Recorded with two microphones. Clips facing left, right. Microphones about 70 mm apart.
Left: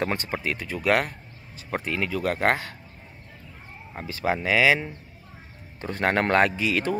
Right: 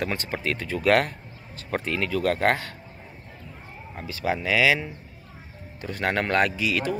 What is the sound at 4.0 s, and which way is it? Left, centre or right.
Speech, left.